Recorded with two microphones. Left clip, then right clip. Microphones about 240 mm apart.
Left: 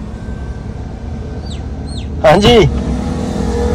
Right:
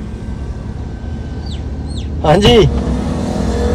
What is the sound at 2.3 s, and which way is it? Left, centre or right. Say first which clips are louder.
Speech: right 1 dB; left.